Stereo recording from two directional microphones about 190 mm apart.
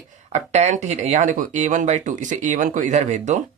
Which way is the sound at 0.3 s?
35° right (ahead or behind).